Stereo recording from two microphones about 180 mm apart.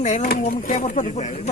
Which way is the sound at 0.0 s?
45° left (ahead or behind).